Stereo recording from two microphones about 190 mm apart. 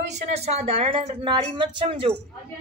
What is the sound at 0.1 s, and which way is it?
Speech, 35° right (ahead or behind).